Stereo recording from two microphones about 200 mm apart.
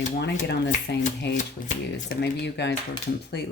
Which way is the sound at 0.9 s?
60° left (ahead or behind).